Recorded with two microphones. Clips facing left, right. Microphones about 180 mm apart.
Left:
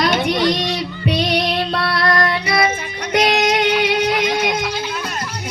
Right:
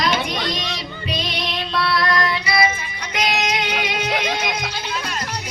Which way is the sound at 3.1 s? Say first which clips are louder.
Left 7 dB; 50° left (ahead or behind).